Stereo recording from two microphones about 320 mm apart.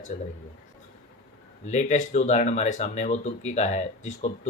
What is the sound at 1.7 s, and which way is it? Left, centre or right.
Speech, left.